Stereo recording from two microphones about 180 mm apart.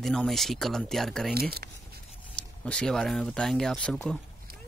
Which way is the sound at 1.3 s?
60° right (ahead or behind).